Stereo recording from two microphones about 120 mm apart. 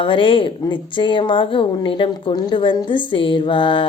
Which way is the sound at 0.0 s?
45° left (ahead or behind).